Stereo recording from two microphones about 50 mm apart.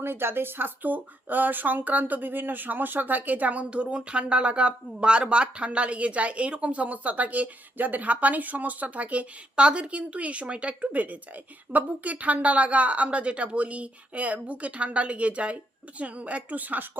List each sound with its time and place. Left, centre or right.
0.0 s a woman's voice: right